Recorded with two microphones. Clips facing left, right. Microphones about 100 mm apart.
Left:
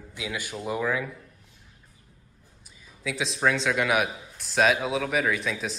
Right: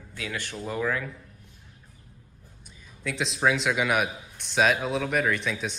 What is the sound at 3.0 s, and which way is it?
Speech, centre (ahead or behind).